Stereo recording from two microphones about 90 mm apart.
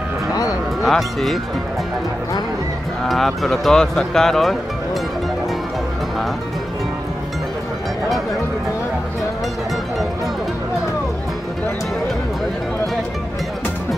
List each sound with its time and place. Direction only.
0.3 s music: 40° left (ahead or behind)
0.8 s speech: centre (ahead or behind)
3.1 s speech: centre (ahead or behind)